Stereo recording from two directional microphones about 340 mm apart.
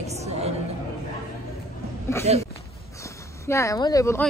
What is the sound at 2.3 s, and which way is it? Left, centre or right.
Speech, centre.